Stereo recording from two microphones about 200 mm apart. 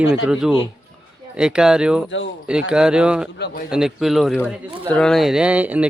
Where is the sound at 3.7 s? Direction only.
5° right (ahead or behind).